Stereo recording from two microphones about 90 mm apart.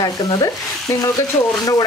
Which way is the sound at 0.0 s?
45° left (ahead or behind).